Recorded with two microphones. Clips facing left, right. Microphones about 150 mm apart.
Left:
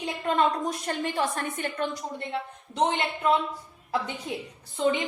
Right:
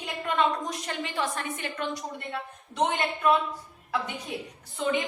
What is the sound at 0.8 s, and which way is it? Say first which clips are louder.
A woman's voice: left 4 dB; 40° left (ahead or behind).